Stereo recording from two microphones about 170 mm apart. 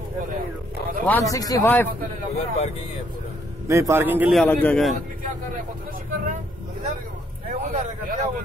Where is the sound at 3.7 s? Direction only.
15° right (ahead or behind).